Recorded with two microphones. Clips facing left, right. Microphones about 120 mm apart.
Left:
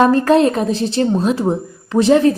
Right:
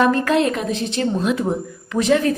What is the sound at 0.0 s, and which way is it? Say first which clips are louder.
Speech: left 5 dB; 35° left (ahead or behind).